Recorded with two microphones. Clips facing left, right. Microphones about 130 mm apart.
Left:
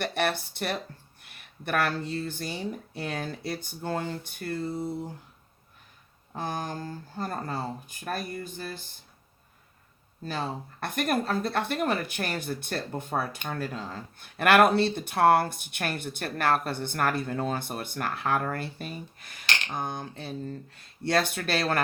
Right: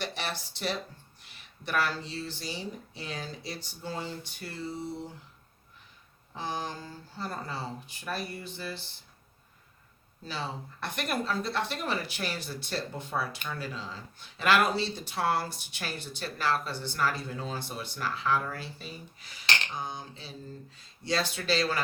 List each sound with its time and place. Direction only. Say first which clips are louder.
0.0 s speech: left 7 dB; 55° left (ahead or behind)
6.3 s speech: left 2 dB; 50° left (ahead or behind)
10.2 s speech: left 4 dB; 50° left (ahead or behind)